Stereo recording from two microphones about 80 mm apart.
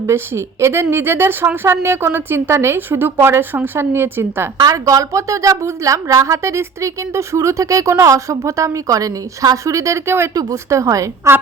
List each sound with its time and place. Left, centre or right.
0.1 s a woman's voice: right
4.5 s a woman's voice: right